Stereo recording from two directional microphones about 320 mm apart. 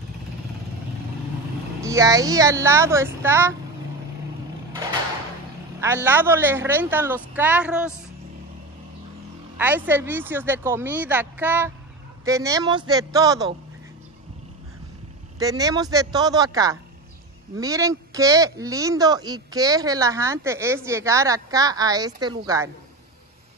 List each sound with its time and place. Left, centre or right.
1.8 s speech: centre
5.8 s speech: centre
9.6 s speech: centre
15.3 s speech: centre